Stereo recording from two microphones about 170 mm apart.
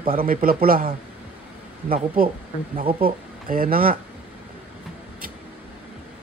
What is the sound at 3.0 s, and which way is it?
Speech, 60° right (ahead or behind).